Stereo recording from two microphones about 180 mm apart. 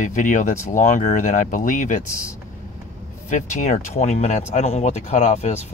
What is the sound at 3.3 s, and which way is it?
Speech, 45° left (ahead or behind).